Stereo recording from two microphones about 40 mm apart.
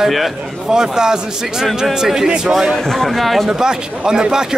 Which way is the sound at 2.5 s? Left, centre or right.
Centre.